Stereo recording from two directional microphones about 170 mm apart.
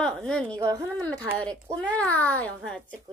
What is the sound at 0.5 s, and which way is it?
Speech, 20° right (ahead or behind).